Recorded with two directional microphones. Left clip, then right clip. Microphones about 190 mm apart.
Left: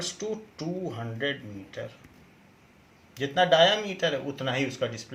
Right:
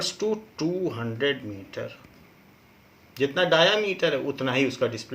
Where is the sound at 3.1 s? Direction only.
40° right (ahead or behind).